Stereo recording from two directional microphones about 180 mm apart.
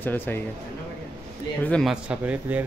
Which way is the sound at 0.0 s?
10° left (ahead or behind).